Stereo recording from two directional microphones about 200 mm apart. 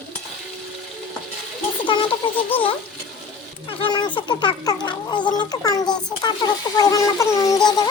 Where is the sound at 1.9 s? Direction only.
25° left (ahead or behind).